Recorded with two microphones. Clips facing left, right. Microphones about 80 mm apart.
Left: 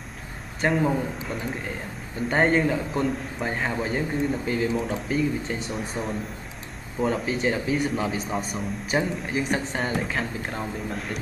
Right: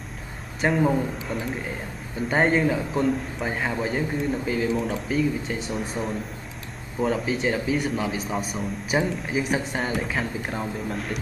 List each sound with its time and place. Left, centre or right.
0.6 s speech: centre